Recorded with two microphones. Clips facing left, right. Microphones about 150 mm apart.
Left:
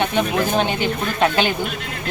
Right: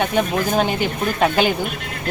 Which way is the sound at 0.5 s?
5° right (ahead or behind).